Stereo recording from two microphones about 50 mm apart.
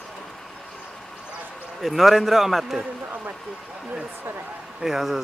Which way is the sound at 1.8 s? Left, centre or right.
Centre.